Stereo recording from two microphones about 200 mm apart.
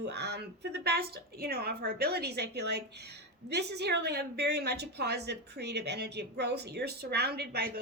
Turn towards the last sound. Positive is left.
turn(degrees=-50)  # may be behind; listen again after turning